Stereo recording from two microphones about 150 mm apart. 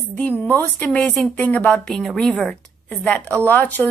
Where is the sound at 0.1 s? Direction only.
10° left (ahead or behind).